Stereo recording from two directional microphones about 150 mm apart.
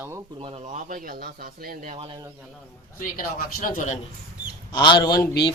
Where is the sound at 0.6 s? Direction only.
55° right (ahead or behind); by 1.9 s 75° right (ahead or behind).